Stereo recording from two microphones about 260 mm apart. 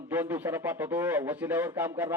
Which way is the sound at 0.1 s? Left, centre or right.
Centre.